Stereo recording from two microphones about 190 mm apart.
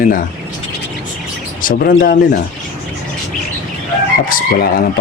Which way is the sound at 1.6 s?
50° left (ahead or behind).